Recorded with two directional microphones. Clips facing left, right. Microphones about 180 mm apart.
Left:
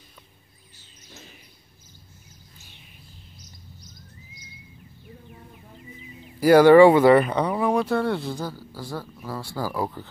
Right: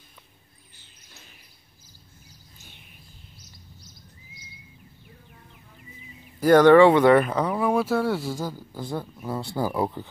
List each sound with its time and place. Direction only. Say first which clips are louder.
6.4 s speech: left 2 dB; 5° left (ahead or behind)
8.4 s speech: right 1 dB; 15° right (ahead or behind)